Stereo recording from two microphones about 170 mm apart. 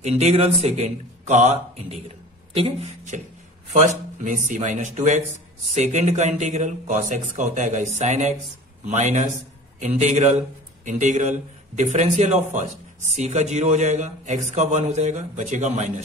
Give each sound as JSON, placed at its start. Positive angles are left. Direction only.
{"t": 0.0, "sound": "a man's voice", "side_deg": -40}
{"t": 3.7, "sound": "a man's voice", "side_deg": -45}